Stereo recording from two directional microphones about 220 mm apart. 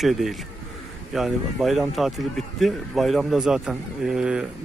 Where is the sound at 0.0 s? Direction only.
Centre (ahead or behind).